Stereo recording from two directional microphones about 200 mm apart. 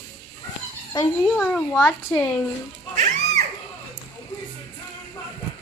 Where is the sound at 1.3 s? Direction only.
5° left (ahead or behind).